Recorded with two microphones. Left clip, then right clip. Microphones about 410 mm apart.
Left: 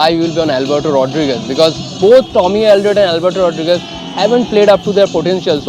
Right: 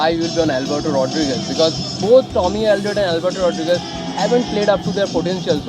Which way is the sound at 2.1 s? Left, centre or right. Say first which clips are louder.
Left 5 dB; left.